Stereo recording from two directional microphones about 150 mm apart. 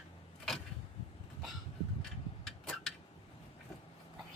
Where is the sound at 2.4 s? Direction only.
Centre (ahead or behind).